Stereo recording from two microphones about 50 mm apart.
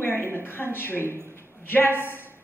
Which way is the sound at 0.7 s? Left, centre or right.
Left.